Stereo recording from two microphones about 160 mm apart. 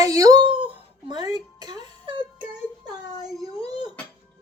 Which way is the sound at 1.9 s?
30° right (ahead or behind).